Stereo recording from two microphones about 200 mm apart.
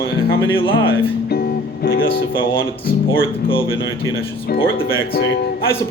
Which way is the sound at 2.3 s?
20° left (ahead or behind).